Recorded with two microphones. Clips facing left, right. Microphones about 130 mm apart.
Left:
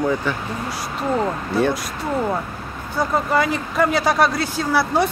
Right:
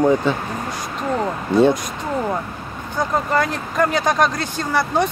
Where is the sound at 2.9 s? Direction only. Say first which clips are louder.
Even; 5° left (ahead or behind).